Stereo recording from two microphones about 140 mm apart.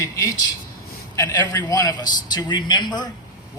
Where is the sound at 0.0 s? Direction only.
20° left (ahead or behind).